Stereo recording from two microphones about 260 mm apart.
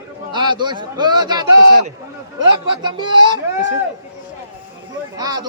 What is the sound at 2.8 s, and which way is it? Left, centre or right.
Speech, centre.